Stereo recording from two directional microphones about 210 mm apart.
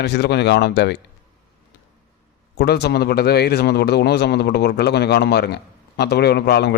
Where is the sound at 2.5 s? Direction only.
50° left (ahead or behind).